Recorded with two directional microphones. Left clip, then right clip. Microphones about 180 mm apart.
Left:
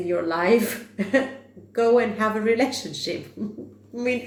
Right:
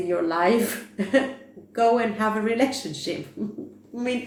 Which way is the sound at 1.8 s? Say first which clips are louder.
Left 1 dB; 35° left (ahead or behind).